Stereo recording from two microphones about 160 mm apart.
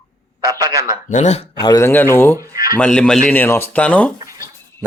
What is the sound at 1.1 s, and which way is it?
Speech, 45° left (ahead or behind).